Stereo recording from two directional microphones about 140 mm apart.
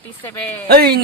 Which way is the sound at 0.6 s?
90° right.